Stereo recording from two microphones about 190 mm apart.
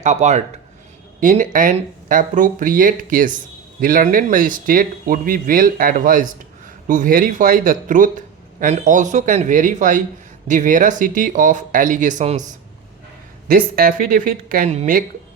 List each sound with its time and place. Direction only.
0.0 s speech: 35° right (ahead or behind)
13.5 s speech: 50° right (ahead or behind)